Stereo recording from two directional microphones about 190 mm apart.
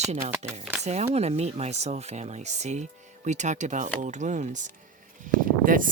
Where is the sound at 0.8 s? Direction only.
35° right (ahead or behind).